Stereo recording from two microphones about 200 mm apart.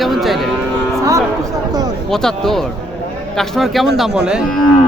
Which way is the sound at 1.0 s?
15° right (ahead or behind).